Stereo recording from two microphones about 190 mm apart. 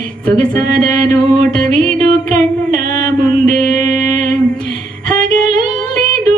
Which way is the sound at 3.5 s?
40° right (ahead or behind).